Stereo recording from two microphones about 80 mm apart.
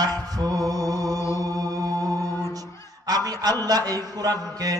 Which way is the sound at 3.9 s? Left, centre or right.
Right.